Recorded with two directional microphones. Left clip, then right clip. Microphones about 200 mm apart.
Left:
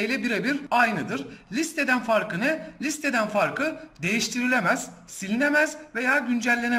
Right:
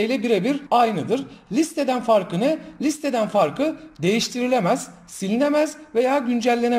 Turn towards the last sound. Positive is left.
turn(degrees=-25)  # may be behind; listen again after turning